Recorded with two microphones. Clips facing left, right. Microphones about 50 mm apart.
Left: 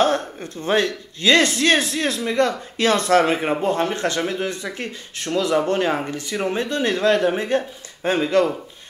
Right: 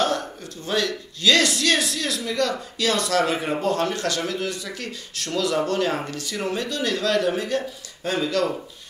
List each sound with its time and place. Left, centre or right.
0.0 s speech: left